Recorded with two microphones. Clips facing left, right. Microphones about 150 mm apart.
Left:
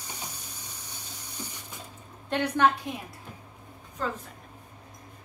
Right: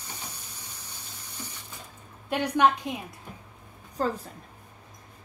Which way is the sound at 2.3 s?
15° right (ahead or behind).